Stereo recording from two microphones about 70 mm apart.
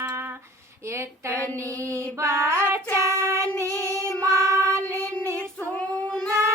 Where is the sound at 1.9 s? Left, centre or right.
Right.